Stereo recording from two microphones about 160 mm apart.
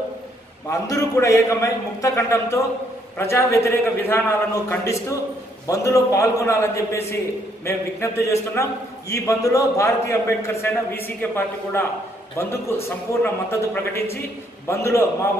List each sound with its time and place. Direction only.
0.7 s a man's voice: 20° left (ahead or behind)